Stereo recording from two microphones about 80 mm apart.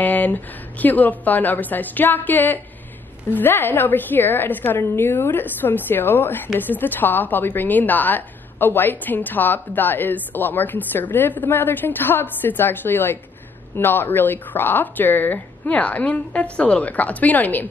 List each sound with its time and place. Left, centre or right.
0.0 s a woman's voice: left